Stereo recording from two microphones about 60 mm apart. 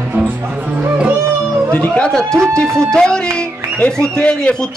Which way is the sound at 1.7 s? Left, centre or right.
Centre.